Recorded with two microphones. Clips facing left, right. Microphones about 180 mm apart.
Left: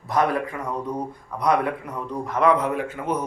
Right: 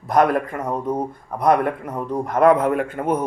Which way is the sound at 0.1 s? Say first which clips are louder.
Right 5 dB; 50° right (ahead or behind).